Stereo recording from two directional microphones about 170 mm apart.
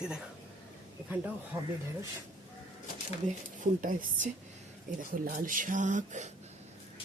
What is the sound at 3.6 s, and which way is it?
Speech, 50° right (ahead or behind).